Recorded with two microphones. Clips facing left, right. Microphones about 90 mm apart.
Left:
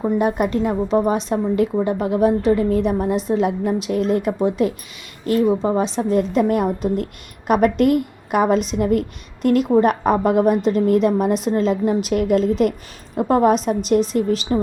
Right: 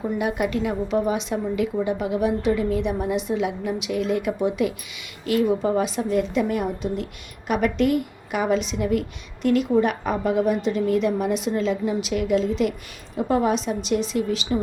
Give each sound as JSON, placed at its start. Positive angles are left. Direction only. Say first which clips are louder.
{"t": 0.0, "sound": "a woman's voice", "louder": "left 5 dB", "side_deg": 40}